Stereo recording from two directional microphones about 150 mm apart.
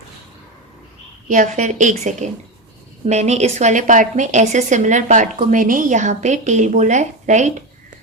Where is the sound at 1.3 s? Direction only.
55° right (ahead or behind).